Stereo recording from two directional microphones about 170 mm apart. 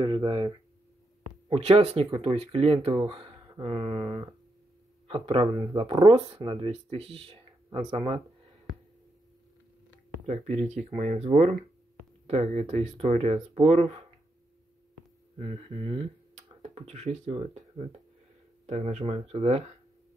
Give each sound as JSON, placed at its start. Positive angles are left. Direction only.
{"t": 0.0, "sound": "speech", "side_deg": -25}
{"t": 1.5, "sound": "speech", "side_deg": -40}
{"t": 10.2, "sound": "speech", "side_deg": -45}
{"t": 15.3, "sound": "speech", "side_deg": -30}